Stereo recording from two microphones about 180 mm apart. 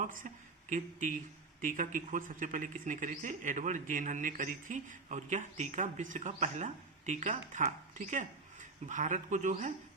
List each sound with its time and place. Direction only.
0.0 s speech: 50° right (ahead or behind)